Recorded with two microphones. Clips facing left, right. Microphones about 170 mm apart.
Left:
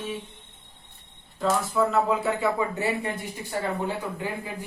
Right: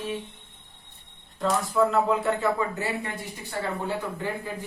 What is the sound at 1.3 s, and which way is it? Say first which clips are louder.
Speech: even; centre (ahead or behind).